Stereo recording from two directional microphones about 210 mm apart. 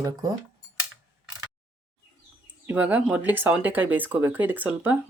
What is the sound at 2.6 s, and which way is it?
Speech, 10° right (ahead or behind).